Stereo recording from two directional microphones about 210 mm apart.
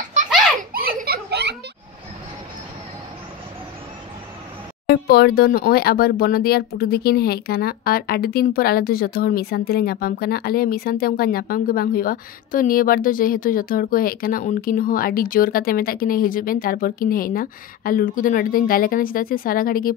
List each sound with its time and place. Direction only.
0.6 s giggle: 40° right (ahead or behind)
4.8 s speech: 50° left (ahead or behind)